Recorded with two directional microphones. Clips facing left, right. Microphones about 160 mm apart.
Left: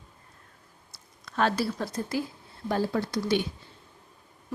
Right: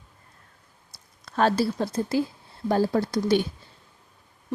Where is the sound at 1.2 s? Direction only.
35° right (ahead or behind).